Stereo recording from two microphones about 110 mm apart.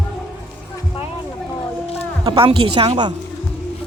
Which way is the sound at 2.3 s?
55° right (ahead or behind).